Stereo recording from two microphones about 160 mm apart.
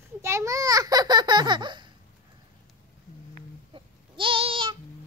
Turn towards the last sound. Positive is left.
turn(degrees=-35)  # may be behind; listen again after turning